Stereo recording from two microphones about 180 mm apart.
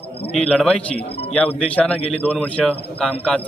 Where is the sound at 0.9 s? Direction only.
35° left (ahead or behind).